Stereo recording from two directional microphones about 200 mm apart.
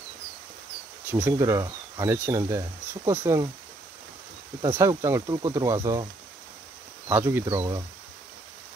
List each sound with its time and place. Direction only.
1.1 s speech: 10° right (ahead or behind)
4.7 s speech: 15° right (ahead or behind)
7.1 s speech: 10° right (ahead or behind)